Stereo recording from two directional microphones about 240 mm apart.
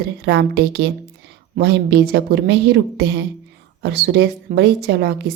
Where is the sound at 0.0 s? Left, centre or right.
Right.